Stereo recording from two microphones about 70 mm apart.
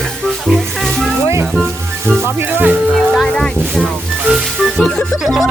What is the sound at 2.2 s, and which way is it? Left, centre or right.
Music, right.